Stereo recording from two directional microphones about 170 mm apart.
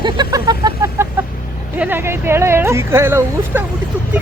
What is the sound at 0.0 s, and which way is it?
Vehicle, 25° right (ahead or behind).